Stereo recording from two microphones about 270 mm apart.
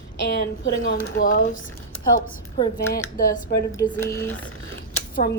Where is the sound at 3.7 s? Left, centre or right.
Centre.